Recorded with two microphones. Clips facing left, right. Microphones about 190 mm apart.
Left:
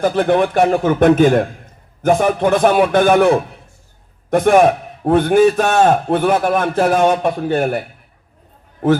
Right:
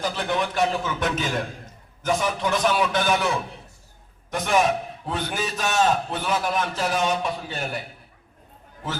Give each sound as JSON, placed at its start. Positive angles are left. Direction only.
{"t": 0.0, "sound": "a man's voice", "side_deg": 55}